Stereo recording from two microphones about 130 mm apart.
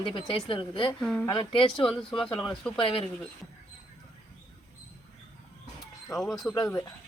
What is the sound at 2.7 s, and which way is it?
Speech, 45° left (ahead or behind).